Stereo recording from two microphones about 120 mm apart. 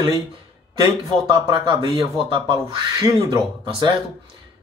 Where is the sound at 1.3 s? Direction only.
40° right (ahead or behind).